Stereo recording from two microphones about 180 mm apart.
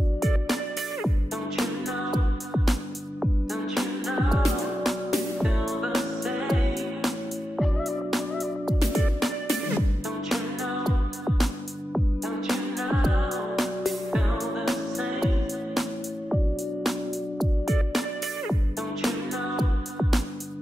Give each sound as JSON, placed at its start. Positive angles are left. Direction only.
{"t": 0.2, "sound": "music", "side_deg": 0}
{"t": 1.6, "sound": "music", "side_deg": 0}
{"t": 17.4, "sound": "music", "side_deg": 0}